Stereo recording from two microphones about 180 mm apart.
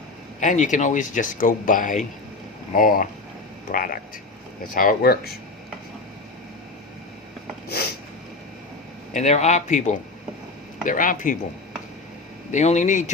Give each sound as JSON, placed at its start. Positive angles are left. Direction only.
{"t": 0.3, "sound": "speech", "side_deg": 45}
{"t": 9.1, "sound": "speech", "side_deg": 40}
{"t": 12.5, "sound": "speech", "side_deg": 40}